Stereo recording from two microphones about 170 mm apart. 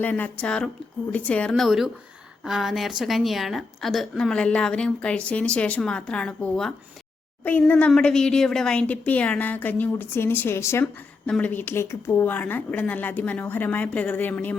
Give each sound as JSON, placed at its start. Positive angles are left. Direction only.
{"t": 0.0, "sound": "a woman's voice", "side_deg": 10}